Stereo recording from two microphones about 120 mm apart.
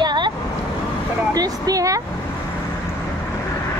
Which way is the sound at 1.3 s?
30° right (ahead or behind).